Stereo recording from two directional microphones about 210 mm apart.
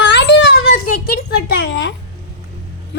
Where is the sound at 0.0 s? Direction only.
55° left (ahead or behind).